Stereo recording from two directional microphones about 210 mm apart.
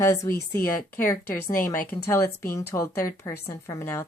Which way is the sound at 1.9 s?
10° left (ahead or behind).